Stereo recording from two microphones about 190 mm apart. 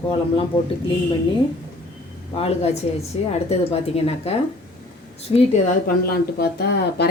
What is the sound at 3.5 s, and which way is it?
Speech, 30° left (ahead or behind).